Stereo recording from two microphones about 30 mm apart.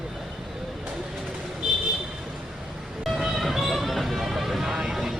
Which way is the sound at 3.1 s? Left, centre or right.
Centre.